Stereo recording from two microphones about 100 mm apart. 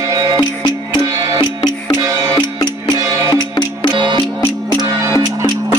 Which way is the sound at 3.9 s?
50° right (ahead or behind).